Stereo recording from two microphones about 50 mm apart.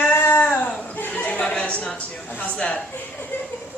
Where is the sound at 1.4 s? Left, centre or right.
Centre.